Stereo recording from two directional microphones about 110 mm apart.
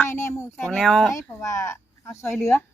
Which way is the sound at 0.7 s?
5° left (ahead or behind).